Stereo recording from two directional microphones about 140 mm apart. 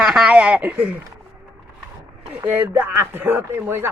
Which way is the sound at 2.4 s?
15° right (ahead or behind).